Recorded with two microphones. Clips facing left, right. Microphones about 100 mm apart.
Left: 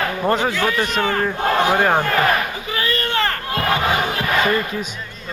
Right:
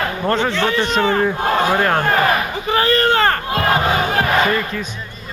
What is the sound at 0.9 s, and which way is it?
Speech, 30° right (ahead or behind).